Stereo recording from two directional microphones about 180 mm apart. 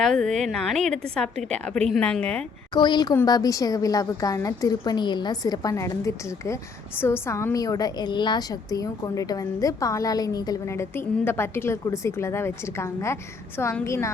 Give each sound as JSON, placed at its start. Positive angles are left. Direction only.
{"t": 0.0, "sound": "a woman's voice", "side_deg": 5}
{"t": 2.7, "sound": "a woman's voice", "side_deg": 25}